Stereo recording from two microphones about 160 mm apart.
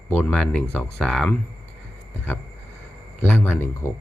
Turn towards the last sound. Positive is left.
turn(degrees=15)  # may be behind; listen again after turning